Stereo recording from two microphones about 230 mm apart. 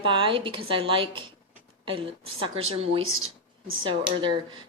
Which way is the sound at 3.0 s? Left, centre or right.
Right.